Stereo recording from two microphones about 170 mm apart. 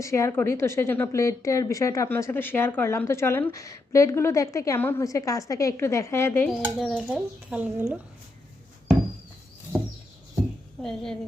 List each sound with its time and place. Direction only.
0.0 s a woman's voice: 15° left (ahead or behind)
6.5 s speech: centre (ahead or behind)
7.1 s a woman's voice: 10° right (ahead or behind)
10.8 s speech: 5° left (ahead or behind)